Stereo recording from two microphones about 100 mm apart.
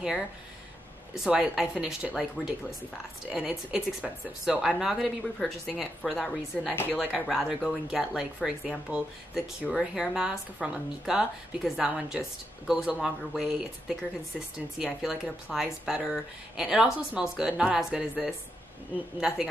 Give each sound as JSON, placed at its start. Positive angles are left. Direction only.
{"t": 1.2, "sound": "a woman's voice", "side_deg": -5}
{"t": 6.7, "sound": "a woman's voice", "side_deg": 20}
{"t": 7.0, "sound": "a woman's voice", "side_deg": -5}
{"t": 15.0, "sound": "speech", "side_deg": 0}